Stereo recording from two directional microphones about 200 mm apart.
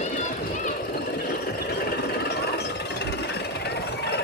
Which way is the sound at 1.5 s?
50° left (ahead or behind).